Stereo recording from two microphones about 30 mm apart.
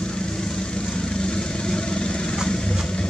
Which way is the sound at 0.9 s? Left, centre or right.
Left.